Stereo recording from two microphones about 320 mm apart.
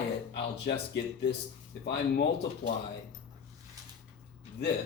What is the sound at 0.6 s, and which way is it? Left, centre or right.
Speech, left.